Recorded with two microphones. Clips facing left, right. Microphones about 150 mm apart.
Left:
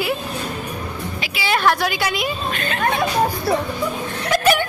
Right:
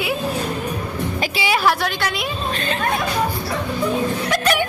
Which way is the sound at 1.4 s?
5° right (ahead or behind).